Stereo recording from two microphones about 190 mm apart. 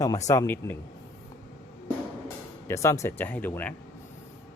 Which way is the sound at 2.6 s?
15° left (ahead or behind).